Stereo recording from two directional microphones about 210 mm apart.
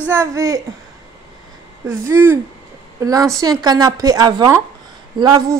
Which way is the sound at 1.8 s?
10° right (ahead or behind).